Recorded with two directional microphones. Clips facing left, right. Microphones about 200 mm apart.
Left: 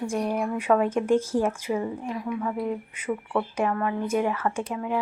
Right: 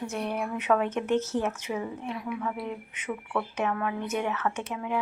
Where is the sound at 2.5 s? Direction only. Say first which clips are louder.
Left 6 dB; 40° left (ahead or behind).